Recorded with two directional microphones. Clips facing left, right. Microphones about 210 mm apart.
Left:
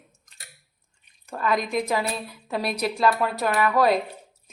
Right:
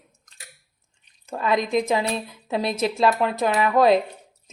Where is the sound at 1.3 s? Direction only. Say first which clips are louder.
Right 3 dB; 25° right (ahead or behind).